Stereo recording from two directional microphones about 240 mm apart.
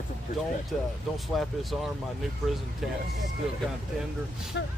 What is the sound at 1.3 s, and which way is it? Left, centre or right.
Speech, centre.